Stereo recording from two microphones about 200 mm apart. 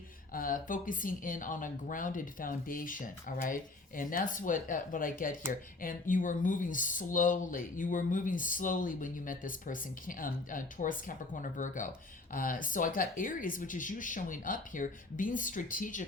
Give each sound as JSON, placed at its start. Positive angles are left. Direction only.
{"t": 0.3, "sound": "speech", "side_deg": 45}